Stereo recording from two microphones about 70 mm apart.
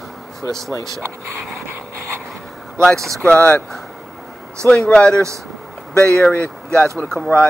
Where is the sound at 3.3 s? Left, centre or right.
Left.